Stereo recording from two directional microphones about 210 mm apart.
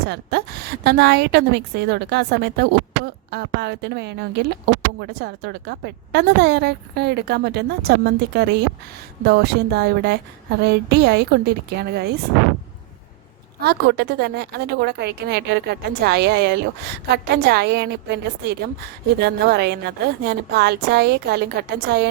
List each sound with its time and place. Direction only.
0.1 s speech: 50° right (ahead or behind)
13.6 s speech: 50° right (ahead or behind)